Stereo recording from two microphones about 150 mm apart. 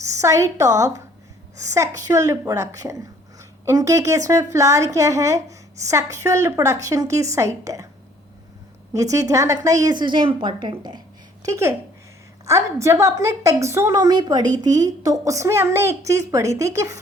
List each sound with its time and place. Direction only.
0.0 s a woman's voice: 20° right (ahead or behind)
8.9 s a woman's voice: 20° right (ahead or behind)
11.4 s a woman's voice: 20° right (ahead or behind)